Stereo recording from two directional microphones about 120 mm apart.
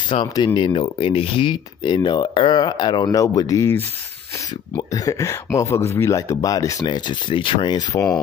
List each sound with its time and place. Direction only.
0.1 s speech: 40° left (ahead or behind)